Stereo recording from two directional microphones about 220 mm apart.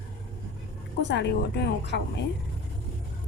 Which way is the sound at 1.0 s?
50° left (ahead or behind).